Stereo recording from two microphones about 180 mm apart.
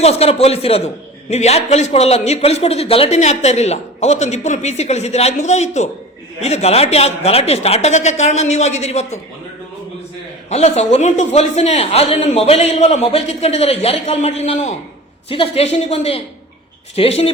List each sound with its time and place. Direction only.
0.0 s a man's voice: 35° left (ahead or behind)
10.5 s a man's voice: 35° left (ahead or behind)